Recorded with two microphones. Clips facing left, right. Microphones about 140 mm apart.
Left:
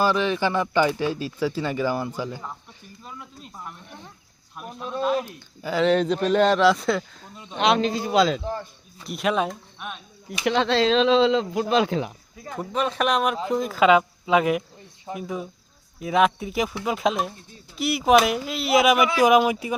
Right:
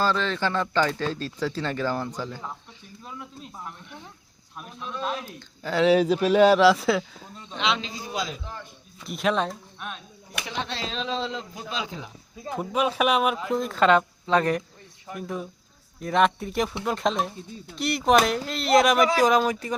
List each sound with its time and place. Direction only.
0.0 s speech: 15° left (ahead or behind)
4.8 s speech: 45° left (ahead or behind)
5.6 s speech: centre (ahead or behind)
7.6 s a man's voice: 55° left (ahead or behind); by 8.4 s 70° left (ahead or behind)
9.0 s speech: centre (ahead or behind)
10.4 s speech: 90° left
11.7 s speech: 65° left (ahead or behind)
12.5 s speech: 10° right (ahead or behind); by 19.7 s 10° left (ahead or behind)